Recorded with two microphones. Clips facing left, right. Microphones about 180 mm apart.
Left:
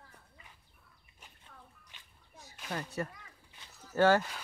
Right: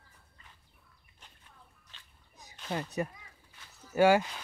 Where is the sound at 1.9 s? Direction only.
15° left (ahead or behind).